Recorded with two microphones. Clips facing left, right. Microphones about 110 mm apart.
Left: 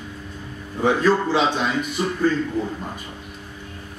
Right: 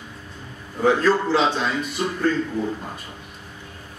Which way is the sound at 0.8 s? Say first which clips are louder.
Even; centre (ahead or behind).